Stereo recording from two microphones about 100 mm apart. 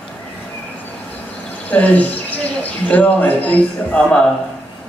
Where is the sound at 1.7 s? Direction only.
15° left (ahead or behind).